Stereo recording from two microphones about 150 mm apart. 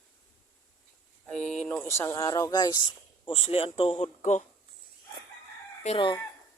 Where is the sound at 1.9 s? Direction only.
20° left (ahead or behind); by 4.4 s 50° left (ahead or behind).